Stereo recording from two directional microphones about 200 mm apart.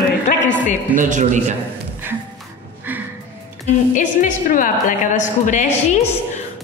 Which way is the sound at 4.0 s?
40° left (ahead or behind).